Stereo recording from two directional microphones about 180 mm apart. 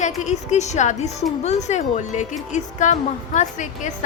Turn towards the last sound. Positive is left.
turn(degrees=40)  # may be behind; listen again after turning